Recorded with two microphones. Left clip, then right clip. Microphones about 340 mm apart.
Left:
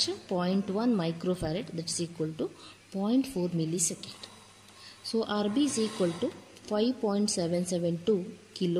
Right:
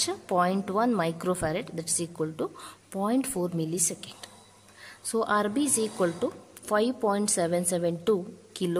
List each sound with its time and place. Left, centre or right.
0.0 s speech: right